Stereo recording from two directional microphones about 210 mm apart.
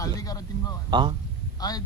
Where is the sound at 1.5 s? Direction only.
20° left (ahead or behind).